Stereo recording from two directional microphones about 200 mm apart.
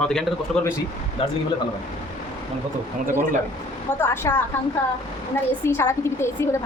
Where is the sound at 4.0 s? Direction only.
10° left (ahead or behind).